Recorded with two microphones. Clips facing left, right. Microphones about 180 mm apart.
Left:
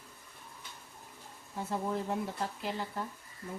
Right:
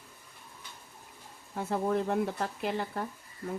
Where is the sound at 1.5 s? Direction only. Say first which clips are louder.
Right 5 dB; 65° right (ahead or behind).